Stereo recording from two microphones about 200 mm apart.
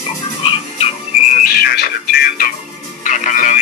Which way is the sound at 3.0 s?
40° left (ahead or behind).